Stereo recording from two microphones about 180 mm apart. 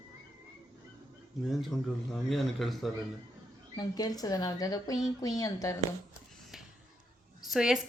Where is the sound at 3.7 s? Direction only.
20° left (ahead or behind).